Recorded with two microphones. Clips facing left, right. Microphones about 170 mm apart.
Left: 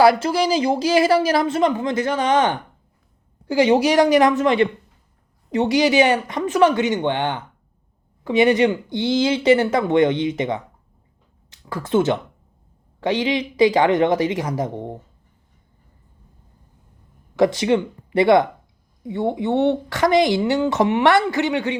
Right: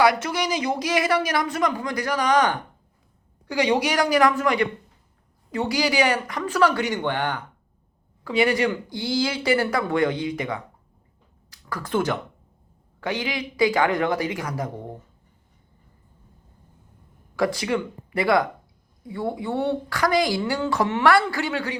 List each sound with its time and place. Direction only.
0.0 s a woman's voice: 30° left (ahead or behind)
17.3 s a woman's voice: 25° left (ahead or behind)